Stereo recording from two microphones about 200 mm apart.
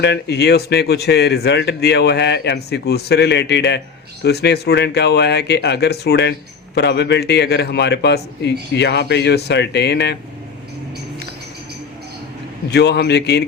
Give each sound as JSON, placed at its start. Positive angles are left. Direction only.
{"t": 0.0, "sound": "speech", "side_deg": 55}
{"t": 12.7, "sound": "speech", "side_deg": 55}